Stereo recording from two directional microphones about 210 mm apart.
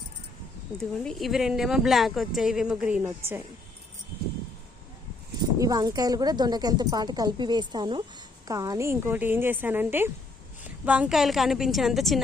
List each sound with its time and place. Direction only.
0.8 s a woman's voice: centre (ahead or behind)
5.5 s a woman's voice: 15° right (ahead or behind); by 12.2 s centre (ahead or behind)